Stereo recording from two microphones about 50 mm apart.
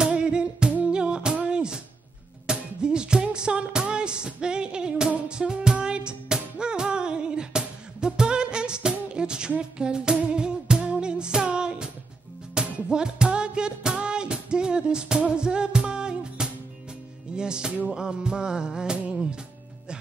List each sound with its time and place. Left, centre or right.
0.0 s music: centre